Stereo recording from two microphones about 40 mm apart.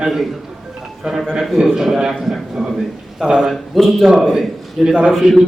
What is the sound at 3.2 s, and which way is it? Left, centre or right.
Speech, centre.